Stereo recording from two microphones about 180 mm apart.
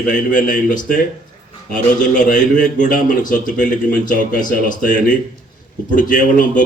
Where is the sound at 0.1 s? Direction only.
45° left (ahead or behind).